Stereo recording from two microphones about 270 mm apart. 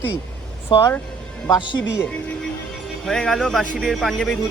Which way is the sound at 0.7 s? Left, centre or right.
Centre.